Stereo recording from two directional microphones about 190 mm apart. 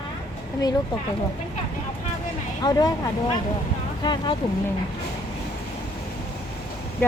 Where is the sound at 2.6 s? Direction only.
20° left (ahead or behind).